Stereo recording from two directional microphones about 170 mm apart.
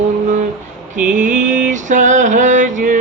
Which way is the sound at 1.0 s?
50° right (ahead or behind).